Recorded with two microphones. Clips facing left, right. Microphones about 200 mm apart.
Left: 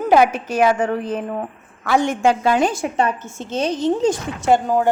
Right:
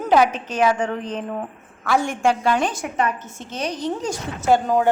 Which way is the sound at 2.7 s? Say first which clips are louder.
Left 3 dB; 30° left (ahead or behind).